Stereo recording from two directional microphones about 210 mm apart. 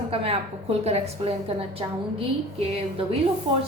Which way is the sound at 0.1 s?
30° right (ahead or behind).